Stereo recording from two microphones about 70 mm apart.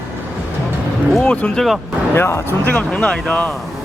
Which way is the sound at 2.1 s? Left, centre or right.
Left.